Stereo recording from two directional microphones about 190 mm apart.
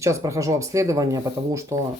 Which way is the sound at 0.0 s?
15° right (ahead or behind).